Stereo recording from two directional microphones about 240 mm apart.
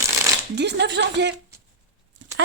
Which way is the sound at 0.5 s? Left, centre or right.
Right.